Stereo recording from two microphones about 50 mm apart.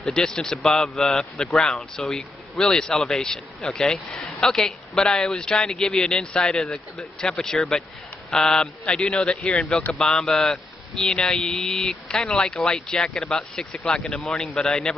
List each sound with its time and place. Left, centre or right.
0.1 s a man's voice: centre
5.7 s a man's voice: centre
8.8 s a man's voice: centre